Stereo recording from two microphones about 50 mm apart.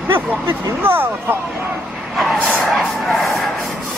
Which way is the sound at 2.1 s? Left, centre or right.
Centre.